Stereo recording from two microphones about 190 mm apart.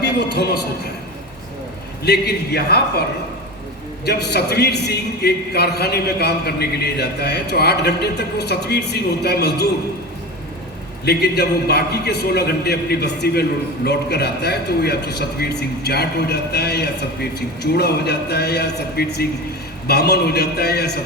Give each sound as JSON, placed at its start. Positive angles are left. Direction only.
{"t": 0.0, "sound": "a man's voice", "side_deg": 60}
{"t": 2.0, "sound": "a man's voice", "side_deg": 60}
{"t": 4.0, "sound": "a man's voice", "side_deg": 60}
{"t": 11.0, "sound": "a man's voice", "side_deg": 60}